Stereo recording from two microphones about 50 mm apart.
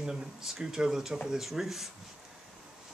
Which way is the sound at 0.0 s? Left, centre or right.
Centre.